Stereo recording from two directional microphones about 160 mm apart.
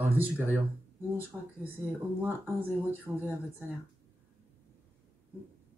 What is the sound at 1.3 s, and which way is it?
Speech, 5° right (ahead or behind).